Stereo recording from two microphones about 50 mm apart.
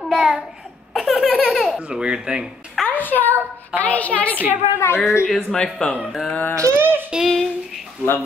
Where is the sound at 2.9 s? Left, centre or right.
Left.